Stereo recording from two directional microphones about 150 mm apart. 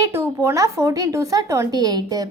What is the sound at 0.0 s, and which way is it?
Speech, 20° right (ahead or behind).